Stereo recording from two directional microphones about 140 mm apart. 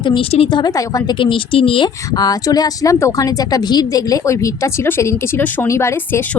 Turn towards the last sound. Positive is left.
turn(degrees=15)  # may be behind; listen again after turning